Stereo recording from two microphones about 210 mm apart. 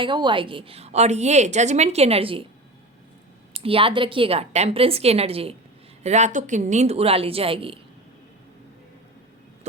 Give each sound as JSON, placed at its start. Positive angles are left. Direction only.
{"t": 0.0, "sound": "a woman's voice", "side_deg": -20}
{"t": 3.5, "sound": "a woman's voice", "side_deg": -25}